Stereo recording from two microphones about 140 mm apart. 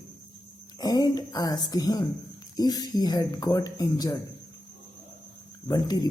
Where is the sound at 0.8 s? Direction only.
25° left (ahead or behind).